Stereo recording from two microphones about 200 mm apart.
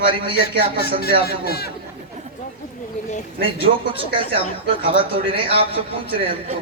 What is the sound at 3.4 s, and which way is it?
Speech, 25° right (ahead or behind).